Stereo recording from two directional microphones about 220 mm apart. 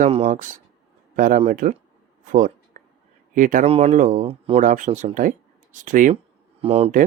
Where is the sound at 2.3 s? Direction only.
35° right (ahead or behind).